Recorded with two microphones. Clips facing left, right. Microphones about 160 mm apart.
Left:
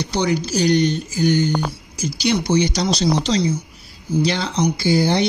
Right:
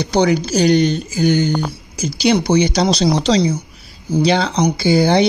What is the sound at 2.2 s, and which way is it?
Speech, 70° right (ahead or behind).